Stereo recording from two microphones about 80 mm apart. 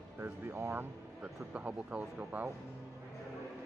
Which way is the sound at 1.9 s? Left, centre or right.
Centre.